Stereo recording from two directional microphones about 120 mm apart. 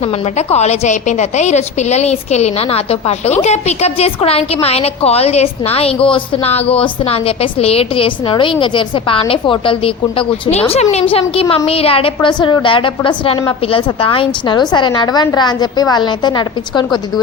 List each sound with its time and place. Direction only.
0.3 s a woman's voice: 65° left (ahead or behind); by 10.5 s 45° left (ahead or behind)
10.5 s a woman's voice: 60° left (ahead or behind); by 17.0 s 40° left (ahead or behind)